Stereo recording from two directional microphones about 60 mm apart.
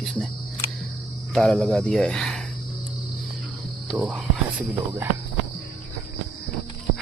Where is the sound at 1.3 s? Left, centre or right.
Centre.